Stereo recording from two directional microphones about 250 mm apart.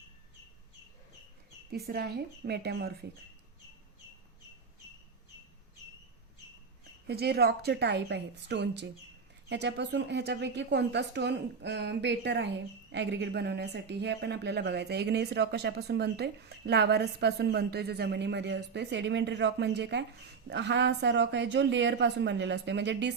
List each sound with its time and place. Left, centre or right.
1.9 s a woman's voice: right
7.1 s a woman's voice: right